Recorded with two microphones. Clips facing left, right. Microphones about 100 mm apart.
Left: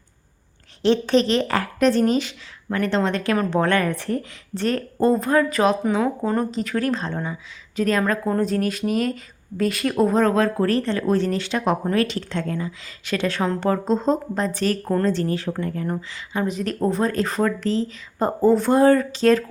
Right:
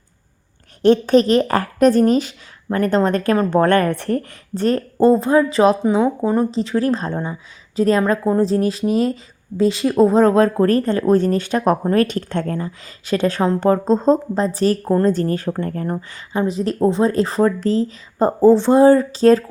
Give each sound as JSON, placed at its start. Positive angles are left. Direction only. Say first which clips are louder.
{"t": 0.8, "sound": "a woman's voice", "louder": "right 5 dB", "side_deg": -45}
{"t": 6.2, "sound": "speech", "louder": "right 5 dB", "side_deg": -15}
{"t": 6.5, "sound": "a woman's voice", "louder": "right 4 dB", "side_deg": -30}
{"t": 16.3, "sound": "speech", "louder": "right 5 dB", "side_deg": -30}